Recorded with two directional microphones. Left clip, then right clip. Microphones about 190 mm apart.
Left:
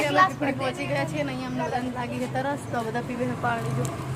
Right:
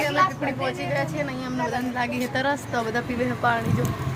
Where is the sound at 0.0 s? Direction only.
Centre (ahead or behind).